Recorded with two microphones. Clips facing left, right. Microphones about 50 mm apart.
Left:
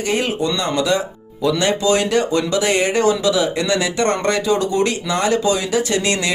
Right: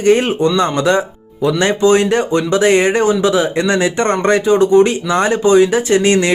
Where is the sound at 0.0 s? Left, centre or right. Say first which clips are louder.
Right 8 dB; right.